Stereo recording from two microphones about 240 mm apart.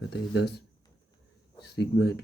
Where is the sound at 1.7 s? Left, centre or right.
Left.